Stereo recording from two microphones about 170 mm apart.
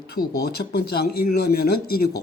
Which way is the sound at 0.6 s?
65° left (ahead or behind).